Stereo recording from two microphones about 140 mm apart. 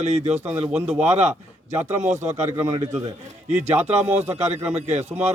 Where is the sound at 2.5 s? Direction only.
25° right (ahead or behind).